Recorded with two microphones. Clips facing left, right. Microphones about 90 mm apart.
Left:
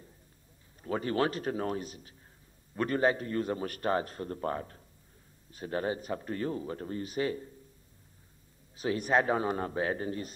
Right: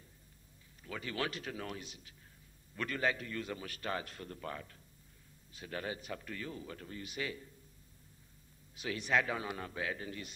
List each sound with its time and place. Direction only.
0.8 s a man's voice: 40° left (ahead or behind)
8.7 s a man's voice: 40° left (ahead or behind)